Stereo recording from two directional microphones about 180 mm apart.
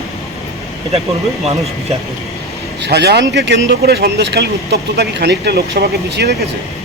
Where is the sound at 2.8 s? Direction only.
65° right (ahead or behind).